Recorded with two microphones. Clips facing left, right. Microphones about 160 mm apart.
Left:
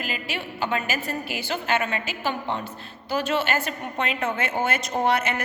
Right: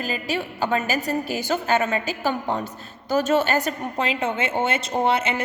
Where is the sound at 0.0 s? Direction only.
40° right (ahead or behind).